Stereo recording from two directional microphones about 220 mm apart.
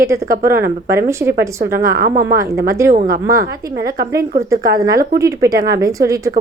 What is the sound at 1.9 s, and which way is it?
Speech, 40° right (ahead or behind).